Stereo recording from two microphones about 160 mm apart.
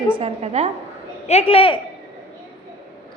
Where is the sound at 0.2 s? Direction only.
40° right (ahead or behind).